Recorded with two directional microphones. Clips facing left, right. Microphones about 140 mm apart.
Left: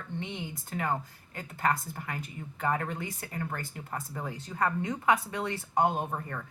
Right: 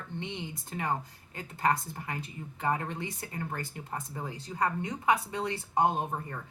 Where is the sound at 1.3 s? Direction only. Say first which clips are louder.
Right 1 dB; 25° right (ahead or behind).